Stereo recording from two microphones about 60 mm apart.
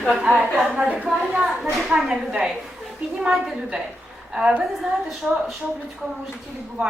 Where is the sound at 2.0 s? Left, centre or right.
Centre.